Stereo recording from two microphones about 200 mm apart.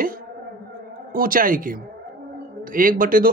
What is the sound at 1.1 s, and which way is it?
Speech, 45° right (ahead or behind).